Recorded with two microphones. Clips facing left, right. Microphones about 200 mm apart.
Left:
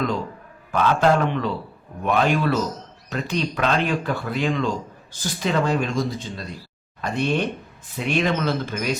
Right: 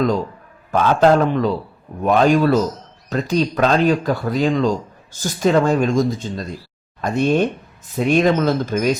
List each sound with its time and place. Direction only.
0.7 s speech: 40° right (ahead or behind)